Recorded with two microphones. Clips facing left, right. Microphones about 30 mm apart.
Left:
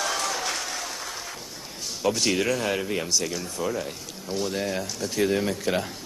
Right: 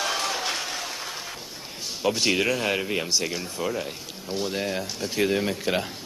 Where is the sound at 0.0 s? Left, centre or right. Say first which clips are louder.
Right 1 dB; right.